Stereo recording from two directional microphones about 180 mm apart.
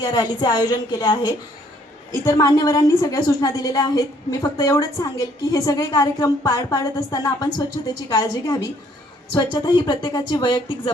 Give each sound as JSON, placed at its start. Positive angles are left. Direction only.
{"t": 0.0, "sound": "a woman's voice", "side_deg": 20}